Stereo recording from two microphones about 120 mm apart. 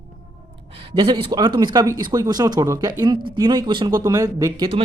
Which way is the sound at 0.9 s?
40° right (ahead or behind).